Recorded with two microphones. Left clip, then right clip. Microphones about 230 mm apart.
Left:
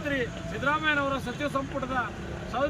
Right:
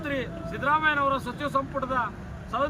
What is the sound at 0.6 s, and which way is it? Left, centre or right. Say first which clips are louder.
Speech: right 3 dB; centre.